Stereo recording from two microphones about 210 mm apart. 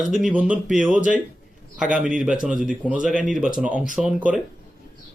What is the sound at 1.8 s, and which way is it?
Speech, 5° right (ahead or behind).